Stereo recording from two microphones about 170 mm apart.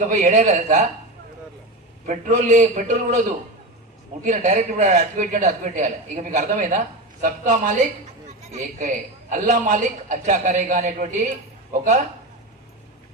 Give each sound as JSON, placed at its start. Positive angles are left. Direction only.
{"t": 0.1, "sound": "a man's voice", "side_deg": -45}
{"t": 2.0, "sound": "a man's voice", "side_deg": -50}